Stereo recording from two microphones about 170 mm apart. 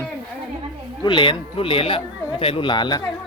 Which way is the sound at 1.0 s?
30° left (ahead or behind).